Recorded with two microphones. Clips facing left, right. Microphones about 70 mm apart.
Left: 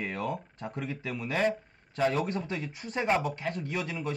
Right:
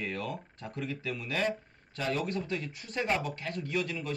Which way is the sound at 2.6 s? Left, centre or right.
Centre.